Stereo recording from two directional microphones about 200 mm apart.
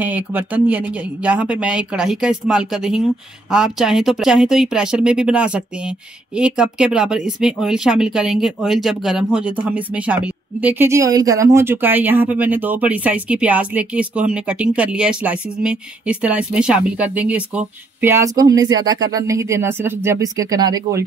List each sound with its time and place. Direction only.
0.0 s speech: 10° right (ahead or behind)